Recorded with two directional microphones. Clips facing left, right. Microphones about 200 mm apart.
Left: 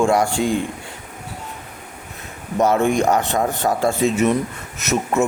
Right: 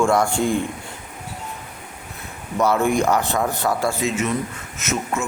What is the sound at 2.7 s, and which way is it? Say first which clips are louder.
Speech: left 1 dB; 25° left (ahead or behind).